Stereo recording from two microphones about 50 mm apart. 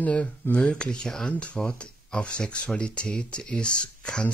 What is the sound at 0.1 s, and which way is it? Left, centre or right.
Speech, left.